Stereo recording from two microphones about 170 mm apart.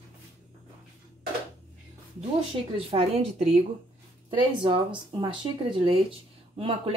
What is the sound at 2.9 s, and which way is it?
Speech, 35° right (ahead or behind).